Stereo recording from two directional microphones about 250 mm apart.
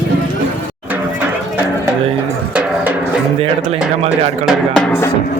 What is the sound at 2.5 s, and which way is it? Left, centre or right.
Drum, centre.